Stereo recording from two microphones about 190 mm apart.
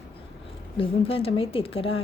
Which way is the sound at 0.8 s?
30° left (ahead or behind).